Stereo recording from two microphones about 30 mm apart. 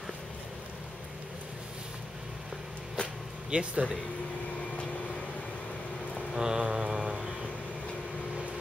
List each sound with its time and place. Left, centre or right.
3.4 s speech: right
6.3 s mantra: right